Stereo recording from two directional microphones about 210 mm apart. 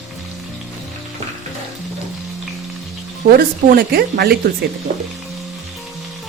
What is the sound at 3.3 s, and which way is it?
A woman's voice, 45° right (ahead or behind).